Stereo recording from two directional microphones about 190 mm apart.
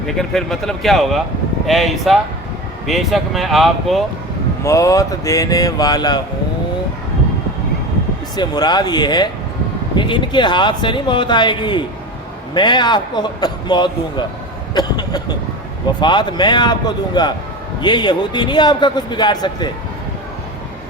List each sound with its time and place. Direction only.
0.2 s speech: centre (ahead or behind)
4.6 s speech: 15° left (ahead or behind)
8.4 s a man's voice: 20° left (ahead or behind)
14.8 s a sound: 20° left (ahead or behind)
16.0 s a man's voice: 25° left (ahead or behind)